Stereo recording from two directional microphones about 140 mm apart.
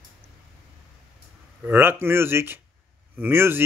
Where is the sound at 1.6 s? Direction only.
15° right (ahead or behind).